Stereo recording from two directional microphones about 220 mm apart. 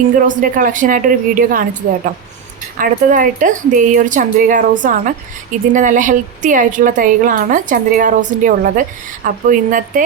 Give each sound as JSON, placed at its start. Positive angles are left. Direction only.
{"t": 0.2, "sound": "a woman's voice", "side_deg": -35}
{"t": 2.7, "sound": "a woman's voice", "side_deg": -35}